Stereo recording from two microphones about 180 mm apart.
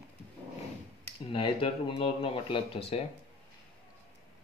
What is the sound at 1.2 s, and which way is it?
Speech, 30° left (ahead or behind).